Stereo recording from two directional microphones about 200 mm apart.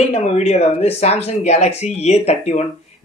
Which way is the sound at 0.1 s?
30° left (ahead or behind).